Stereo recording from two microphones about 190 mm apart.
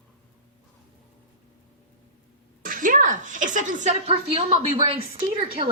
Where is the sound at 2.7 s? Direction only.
45° right (ahead or behind).